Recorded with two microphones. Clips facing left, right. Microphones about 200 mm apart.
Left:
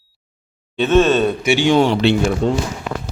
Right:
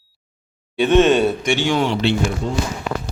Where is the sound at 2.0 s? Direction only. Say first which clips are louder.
Left 4 dB; 70° left (ahead or behind).